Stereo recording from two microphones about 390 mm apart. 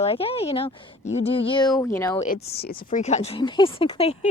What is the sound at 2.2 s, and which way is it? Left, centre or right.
Speech, left.